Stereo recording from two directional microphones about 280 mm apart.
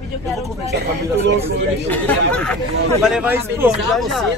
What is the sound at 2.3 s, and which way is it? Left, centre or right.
Speech, centre.